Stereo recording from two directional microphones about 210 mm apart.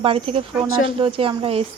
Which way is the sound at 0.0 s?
25° right (ahead or behind).